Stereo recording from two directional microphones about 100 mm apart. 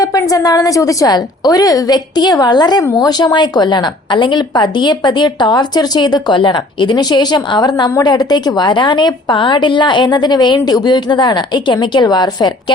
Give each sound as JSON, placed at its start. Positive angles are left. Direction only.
{"t": 0.0, "sound": "a woman's voice", "side_deg": 35}